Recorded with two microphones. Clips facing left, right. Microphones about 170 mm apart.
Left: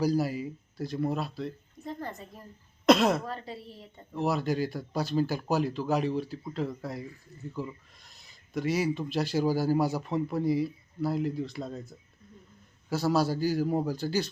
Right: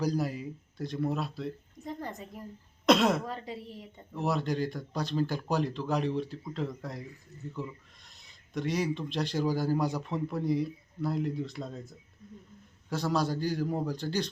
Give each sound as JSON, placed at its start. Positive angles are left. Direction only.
{"t": 0.0, "sound": "speech", "side_deg": 5}
{"t": 1.8, "sound": "a sound", "side_deg": -15}
{"t": 2.8, "sound": "speech", "side_deg": 0}
{"t": 3.2, "sound": "a woman's voice", "side_deg": -15}
{"t": 4.1, "sound": "speech", "side_deg": 0}